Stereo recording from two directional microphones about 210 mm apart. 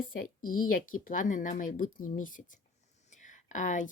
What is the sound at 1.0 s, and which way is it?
A woman's voice, 40° left (ahead or behind).